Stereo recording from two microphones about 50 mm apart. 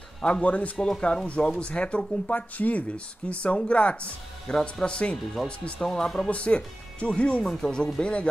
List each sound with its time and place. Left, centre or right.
0.2 s speech: left
0.7 s speech: centre
1.2 s speech: left
2.5 s speech: left; by 6.1 s centre
6.1 s speech: left
7.4 s speech: centre
7.8 s speech: left